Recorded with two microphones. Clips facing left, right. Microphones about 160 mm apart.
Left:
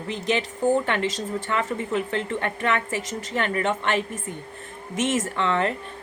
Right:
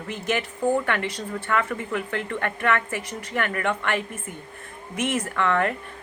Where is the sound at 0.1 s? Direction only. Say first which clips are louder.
Left 2 dB; 20° left (ahead or behind).